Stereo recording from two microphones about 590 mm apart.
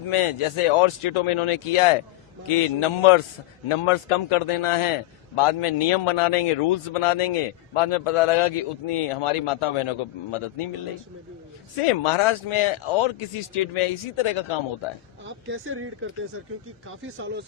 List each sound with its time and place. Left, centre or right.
0.1 s a man's voice: left
11.8 s a man's voice: left
15.4 s speech: centre
17.0 s speech: centre